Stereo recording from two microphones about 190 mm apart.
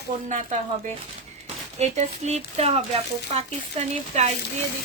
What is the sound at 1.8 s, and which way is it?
A woman's voice, 35° right (ahead or behind).